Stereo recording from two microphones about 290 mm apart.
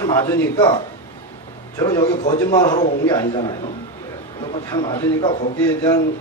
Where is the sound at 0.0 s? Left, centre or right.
Centre.